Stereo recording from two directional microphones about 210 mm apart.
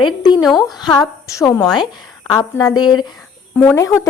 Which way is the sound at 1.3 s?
15° left (ahead or behind).